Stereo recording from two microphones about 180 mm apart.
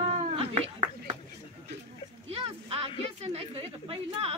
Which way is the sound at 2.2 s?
35° right (ahead or behind).